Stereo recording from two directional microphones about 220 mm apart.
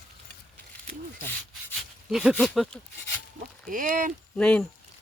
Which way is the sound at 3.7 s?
35° right (ahead or behind).